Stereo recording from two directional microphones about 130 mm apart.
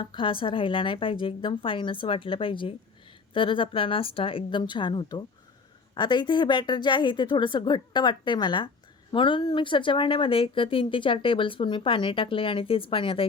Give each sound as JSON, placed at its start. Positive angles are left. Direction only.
{"t": 0.0, "sound": "speech", "side_deg": 40}